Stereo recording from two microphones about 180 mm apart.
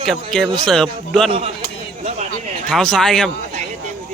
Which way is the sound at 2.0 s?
40° right (ahead or behind).